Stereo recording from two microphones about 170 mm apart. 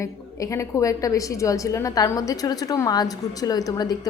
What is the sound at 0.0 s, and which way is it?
A woman's voice, 20° left (ahead or behind).